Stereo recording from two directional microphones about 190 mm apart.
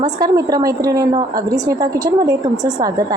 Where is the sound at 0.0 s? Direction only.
20° right (ahead or behind).